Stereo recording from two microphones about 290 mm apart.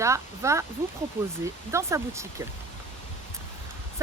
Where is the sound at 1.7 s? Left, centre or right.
Centre.